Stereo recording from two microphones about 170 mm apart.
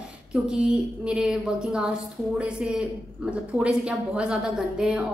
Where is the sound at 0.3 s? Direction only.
5° right (ahead or behind).